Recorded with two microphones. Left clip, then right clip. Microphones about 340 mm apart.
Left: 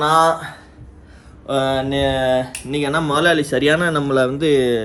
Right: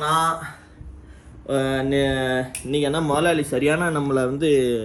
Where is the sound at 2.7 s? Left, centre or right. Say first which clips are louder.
Left 2 dB; left.